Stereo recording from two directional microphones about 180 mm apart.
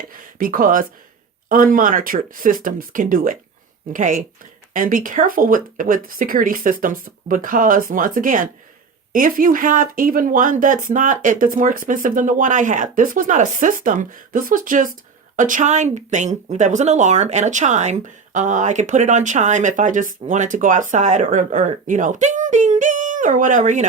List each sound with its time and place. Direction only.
0.3 s speech: 50° right (ahead or behind)